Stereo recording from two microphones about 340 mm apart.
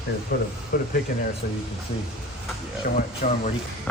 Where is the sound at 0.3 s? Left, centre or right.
Left.